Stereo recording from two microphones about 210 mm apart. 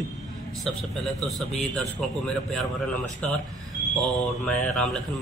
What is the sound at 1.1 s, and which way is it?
Speech, centre (ahead or behind).